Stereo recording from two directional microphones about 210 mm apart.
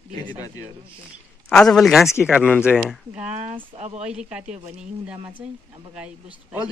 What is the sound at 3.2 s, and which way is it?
Speech, 35° right (ahead or behind).